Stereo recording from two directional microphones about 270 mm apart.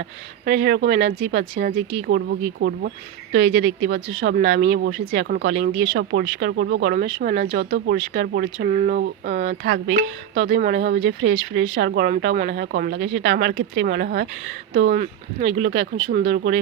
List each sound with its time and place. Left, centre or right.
0.4 s speech: right
9.5 s speech: right
14.9 s speech: right
15.4 s speech: right